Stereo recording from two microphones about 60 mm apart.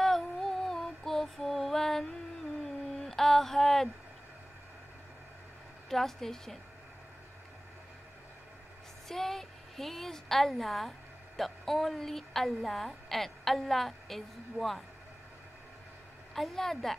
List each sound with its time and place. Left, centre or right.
0.0 s music: centre
2.6 s a sound: centre
5.9 s a woman's voice: centre
9.1 s a woman's voice: centre
16.3 s a woman's voice: centre